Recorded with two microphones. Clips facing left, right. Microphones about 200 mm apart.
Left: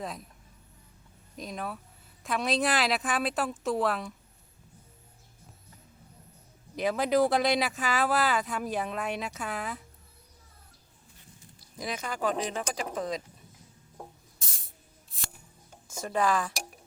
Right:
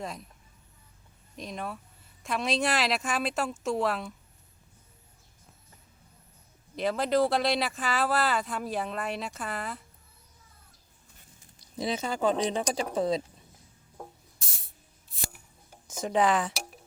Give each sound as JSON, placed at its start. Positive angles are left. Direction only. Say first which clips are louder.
{"t": 0.0, "sound": "speech", "louder": "even", "side_deg": 0}
{"t": 1.4, "sound": "speech", "louder": "even", "side_deg": 0}
{"t": 6.7, "sound": "speech", "louder": "even", "side_deg": 0}
{"t": 11.6, "sound": "speech", "louder": "right 5 dB", "side_deg": -25}
{"t": 16.0, "sound": "speech", "louder": "right 2 dB", "side_deg": -20}